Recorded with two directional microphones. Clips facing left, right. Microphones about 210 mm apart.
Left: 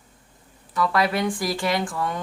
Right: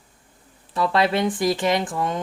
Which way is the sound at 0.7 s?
25° right (ahead or behind).